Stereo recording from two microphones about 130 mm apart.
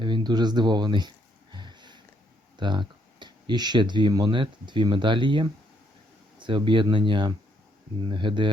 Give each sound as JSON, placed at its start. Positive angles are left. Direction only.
{"t": 0.0, "sound": "speech", "side_deg": -35}
{"t": 1.5, "sound": "a sound", "side_deg": -35}
{"t": 2.6, "sound": "speech", "side_deg": -35}